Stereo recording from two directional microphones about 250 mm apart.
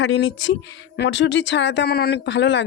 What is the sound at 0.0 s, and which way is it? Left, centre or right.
Speech, left.